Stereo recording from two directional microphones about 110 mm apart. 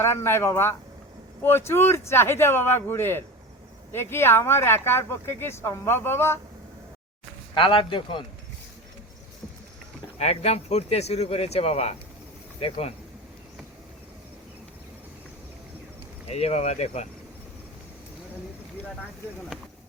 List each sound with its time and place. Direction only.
0.0 s speech: 25° left (ahead or behind)
7.5 s speech: 50° left (ahead or behind)
10.2 s speech: 75° left (ahead or behind)
16.3 s speech: 80° left